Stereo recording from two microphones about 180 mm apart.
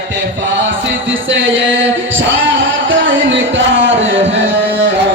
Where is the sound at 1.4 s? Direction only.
90° right.